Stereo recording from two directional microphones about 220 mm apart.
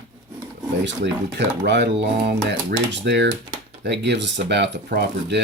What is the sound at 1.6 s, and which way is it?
Speech, 50° right (ahead or behind).